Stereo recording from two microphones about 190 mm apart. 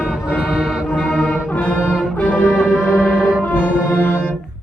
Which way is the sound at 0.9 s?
5° left (ahead or behind).